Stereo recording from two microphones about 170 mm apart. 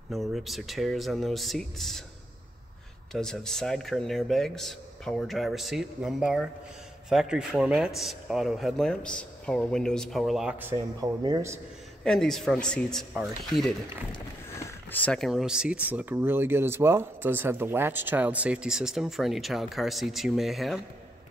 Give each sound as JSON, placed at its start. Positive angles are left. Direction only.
{"t": 0.1, "sound": "speech", "side_deg": 0}
{"t": 3.1, "sound": "speech", "side_deg": 5}
{"t": 10.6, "sound": "a man's voice", "side_deg": -15}
{"t": 12.0, "sound": "speech", "side_deg": 5}